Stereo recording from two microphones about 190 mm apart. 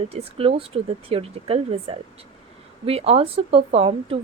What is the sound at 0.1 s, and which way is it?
A woman's voice, 30° right (ahead or behind).